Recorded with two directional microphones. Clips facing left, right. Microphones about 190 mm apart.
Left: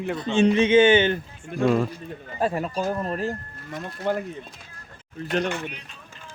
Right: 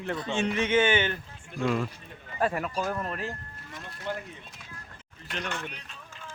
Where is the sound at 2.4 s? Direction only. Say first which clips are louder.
Left 3 dB; 30° left (ahead or behind).